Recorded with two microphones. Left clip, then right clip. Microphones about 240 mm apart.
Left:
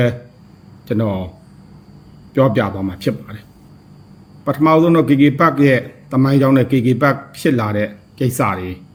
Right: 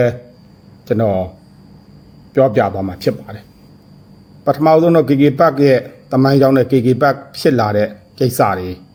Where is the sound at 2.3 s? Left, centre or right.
Centre.